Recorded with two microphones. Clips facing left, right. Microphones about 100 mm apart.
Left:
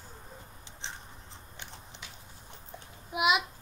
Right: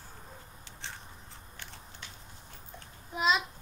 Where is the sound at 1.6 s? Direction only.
20° left (ahead or behind).